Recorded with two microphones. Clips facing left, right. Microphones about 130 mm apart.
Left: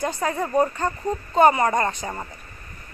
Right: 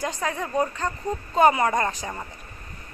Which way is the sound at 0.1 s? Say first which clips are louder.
Left 3 dB; centre (ahead or behind).